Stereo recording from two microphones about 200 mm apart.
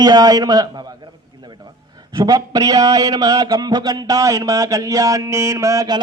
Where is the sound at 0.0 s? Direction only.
20° right (ahead or behind).